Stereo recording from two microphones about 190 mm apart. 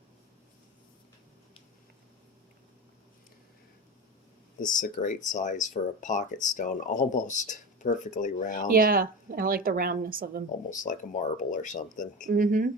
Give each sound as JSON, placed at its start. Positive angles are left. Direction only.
{"t": 4.6, "sound": "speech", "side_deg": 40}
{"t": 8.7, "sound": "a woman's voice", "side_deg": -50}
{"t": 10.7, "sound": "speech", "side_deg": 40}
{"t": 12.3, "sound": "a woman's voice", "side_deg": -45}